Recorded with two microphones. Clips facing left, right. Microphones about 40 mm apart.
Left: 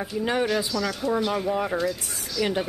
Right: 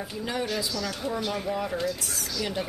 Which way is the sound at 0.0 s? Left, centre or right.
Left.